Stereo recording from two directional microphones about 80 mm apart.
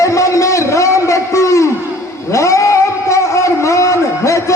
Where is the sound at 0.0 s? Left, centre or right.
Left.